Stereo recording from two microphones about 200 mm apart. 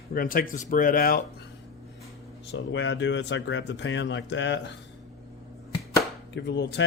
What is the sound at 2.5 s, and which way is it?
Speech, 65° left (ahead or behind).